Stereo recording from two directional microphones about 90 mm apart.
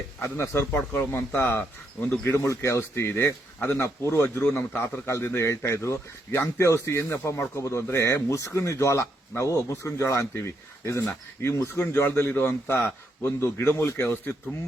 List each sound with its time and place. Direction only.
0.2 s a man's voice: 30° left (ahead or behind)